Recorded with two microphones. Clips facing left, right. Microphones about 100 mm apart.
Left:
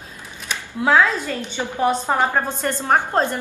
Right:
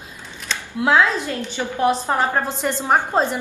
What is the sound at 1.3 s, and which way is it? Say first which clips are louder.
A woman's voice: even; 15° left (ahead or behind).